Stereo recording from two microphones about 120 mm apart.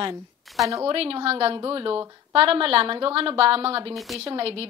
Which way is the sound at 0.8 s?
50° right (ahead or behind).